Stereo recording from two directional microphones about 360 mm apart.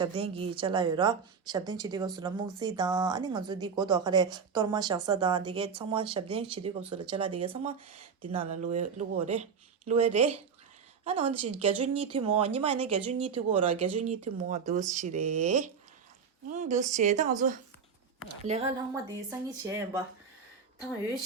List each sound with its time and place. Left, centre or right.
0.0 s a woman's voice: centre